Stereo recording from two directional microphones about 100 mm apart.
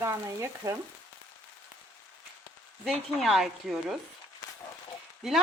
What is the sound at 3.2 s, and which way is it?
Speech, 5° right (ahead or behind).